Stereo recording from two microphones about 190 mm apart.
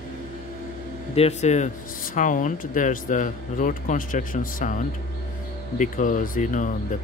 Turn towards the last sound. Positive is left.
turn(degrees=40)  # may be behind; listen again after turning